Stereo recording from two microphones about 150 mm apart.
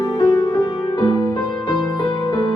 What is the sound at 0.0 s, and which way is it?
Music, 30° left (ahead or behind).